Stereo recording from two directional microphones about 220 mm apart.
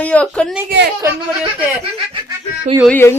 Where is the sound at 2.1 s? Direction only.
20° right (ahead or behind).